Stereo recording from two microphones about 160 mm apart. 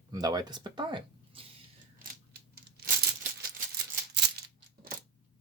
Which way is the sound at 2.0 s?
85° right.